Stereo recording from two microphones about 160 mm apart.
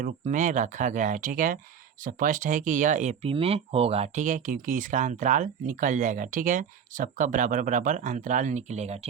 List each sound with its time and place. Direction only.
0.0 s speech: 50° right (ahead or behind)